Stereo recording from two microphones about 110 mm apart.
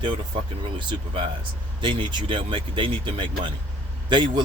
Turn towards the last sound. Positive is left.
turn(degrees=-45)  # may be behind; listen again after turning